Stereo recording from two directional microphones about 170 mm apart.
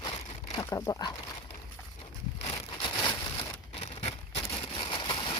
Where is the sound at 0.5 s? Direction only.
20° left (ahead or behind).